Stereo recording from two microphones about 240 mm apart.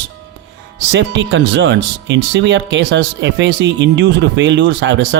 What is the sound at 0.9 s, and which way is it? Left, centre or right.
Speech, right.